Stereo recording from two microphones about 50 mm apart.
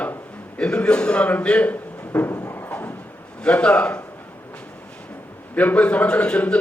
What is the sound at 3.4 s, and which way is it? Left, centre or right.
Speech, left.